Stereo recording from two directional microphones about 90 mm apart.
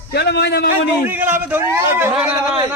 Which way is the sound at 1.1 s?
20° right (ahead or behind).